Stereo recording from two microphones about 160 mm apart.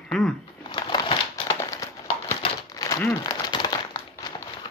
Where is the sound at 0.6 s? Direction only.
30° left (ahead or behind).